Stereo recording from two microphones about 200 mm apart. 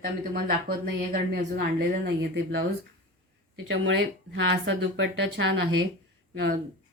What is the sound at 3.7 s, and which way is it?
Speech, 65° right (ahead or behind).